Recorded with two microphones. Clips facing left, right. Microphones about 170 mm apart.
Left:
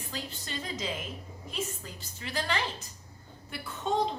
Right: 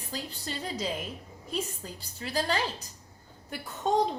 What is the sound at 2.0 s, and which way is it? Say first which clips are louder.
Speech: right 4 dB; 35° right (ahead or behind).